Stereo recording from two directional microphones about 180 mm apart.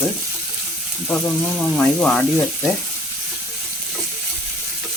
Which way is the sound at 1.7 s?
5° left (ahead or behind).